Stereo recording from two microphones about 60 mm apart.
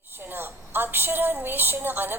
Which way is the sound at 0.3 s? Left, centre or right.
Right.